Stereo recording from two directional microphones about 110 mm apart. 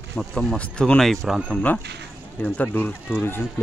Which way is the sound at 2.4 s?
15° left (ahead or behind).